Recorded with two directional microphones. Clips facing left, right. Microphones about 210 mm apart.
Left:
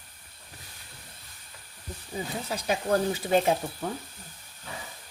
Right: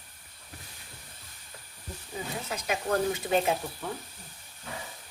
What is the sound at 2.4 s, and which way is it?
Speech, 30° left (ahead or behind).